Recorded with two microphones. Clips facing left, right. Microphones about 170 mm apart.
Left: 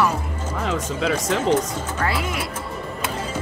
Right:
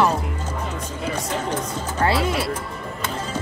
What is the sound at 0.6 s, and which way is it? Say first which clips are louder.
Music: left 9 dB; 90° left.